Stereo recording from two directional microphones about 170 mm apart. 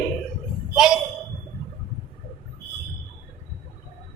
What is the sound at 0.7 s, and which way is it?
Speech, 5° right (ahead or behind).